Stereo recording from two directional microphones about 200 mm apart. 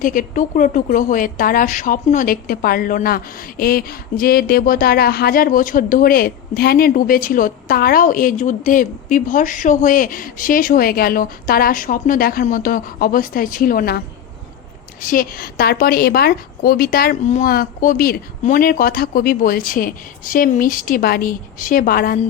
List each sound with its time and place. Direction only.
0.0 s speech: 45° left (ahead or behind)
15.0 s speech: 45° left (ahead or behind)